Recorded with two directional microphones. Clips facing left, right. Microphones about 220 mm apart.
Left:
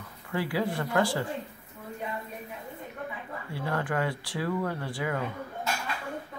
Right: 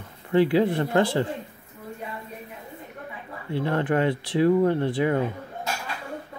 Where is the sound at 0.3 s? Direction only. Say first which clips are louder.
Right 10 dB; 25° right (ahead or behind).